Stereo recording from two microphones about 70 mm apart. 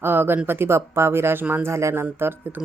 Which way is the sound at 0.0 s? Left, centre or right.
Right.